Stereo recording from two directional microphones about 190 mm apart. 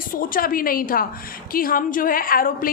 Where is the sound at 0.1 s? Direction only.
50° left (ahead or behind).